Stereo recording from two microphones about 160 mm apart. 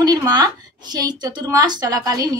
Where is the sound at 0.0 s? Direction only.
25° right (ahead or behind).